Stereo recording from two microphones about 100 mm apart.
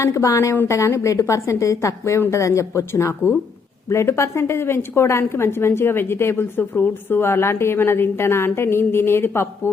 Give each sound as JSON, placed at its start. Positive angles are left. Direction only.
{"t": 0.0, "sound": "a woman's voice", "side_deg": 30}